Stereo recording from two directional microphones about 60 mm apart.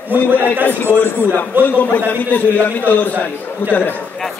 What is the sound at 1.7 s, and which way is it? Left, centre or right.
A man's voice, left.